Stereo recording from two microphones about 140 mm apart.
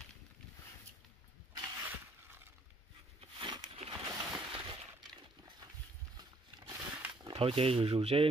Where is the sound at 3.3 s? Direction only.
35° right (ahead or behind).